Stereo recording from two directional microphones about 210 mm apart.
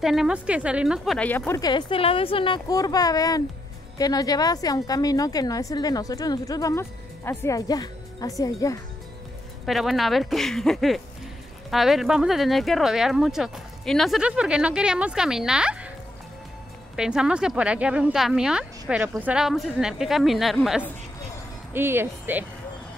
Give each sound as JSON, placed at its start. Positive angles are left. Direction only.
{"t": 0.0, "sound": "speech", "side_deg": 0}
{"t": 1.6, "sound": "a woman's voice", "side_deg": 20}
{"t": 9.7, "sound": "speech", "side_deg": 0}
{"t": 16.9, "sound": "speech", "side_deg": -5}
{"t": 21.7, "sound": "speech", "side_deg": -10}